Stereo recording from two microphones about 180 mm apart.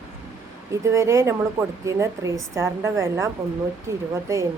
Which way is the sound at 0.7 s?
15° right (ahead or behind).